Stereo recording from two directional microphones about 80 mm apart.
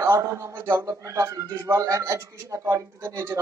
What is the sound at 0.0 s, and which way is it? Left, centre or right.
Speech, right.